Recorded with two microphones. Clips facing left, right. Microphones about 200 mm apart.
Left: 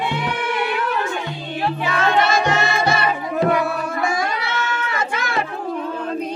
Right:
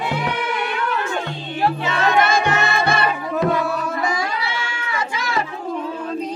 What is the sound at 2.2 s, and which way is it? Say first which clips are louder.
Music: even; 55° right (ahead or behind).